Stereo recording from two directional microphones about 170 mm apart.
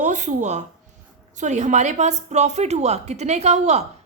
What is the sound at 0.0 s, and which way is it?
A woman's voice, 45° right (ahead or behind).